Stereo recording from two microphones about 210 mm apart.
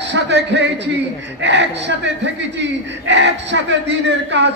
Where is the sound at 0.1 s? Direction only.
55° right (ahead or behind).